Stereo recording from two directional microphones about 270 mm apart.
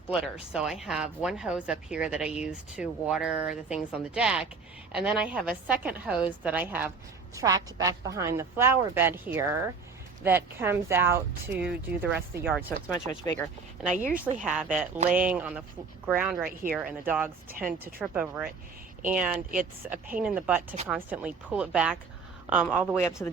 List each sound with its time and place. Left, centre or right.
0.1 s speech: centre
12.5 s speech: centre
13.9 s a woman's voice: right
14.4 s speech: centre